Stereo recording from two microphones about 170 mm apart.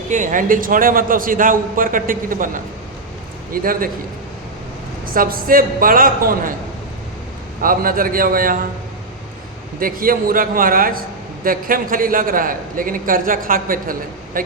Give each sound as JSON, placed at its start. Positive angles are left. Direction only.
{"t": 0.1, "sound": "a man's voice", "side_deg": -50}
{"t": 5.0, "sound": "a man's voice", "side_deg": -55}
{"t": 7.6, "sound": "a man's voice", "side_deg": -55}
{"t": 9.8, "sound": "a man's voice", "side_deg": -55}